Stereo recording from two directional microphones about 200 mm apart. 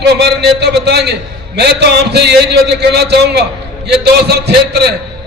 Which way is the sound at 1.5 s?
55° right (ahead or behind).